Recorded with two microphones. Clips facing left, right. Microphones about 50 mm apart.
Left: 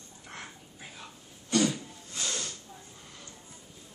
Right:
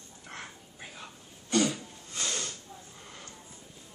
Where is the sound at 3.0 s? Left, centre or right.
Right.